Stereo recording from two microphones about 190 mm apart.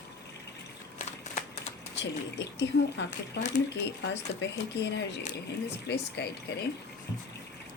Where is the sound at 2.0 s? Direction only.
65° left (ahead or behind).